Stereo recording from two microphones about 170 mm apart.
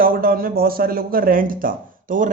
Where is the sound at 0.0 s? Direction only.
60° right (ahead or behind).